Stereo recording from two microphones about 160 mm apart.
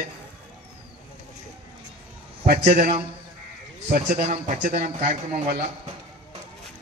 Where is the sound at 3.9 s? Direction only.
55° right (ahead or behind).